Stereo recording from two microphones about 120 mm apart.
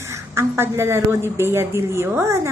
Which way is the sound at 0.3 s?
20° right (ahead or behind).